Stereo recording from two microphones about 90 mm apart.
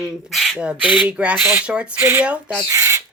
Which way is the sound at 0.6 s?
15° right (ahead or behind).